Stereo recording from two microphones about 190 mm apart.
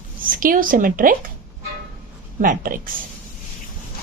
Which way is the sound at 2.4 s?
45° right (ahead or behind).